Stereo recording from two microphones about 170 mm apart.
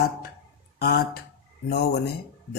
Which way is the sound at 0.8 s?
65° left (ahead or behind).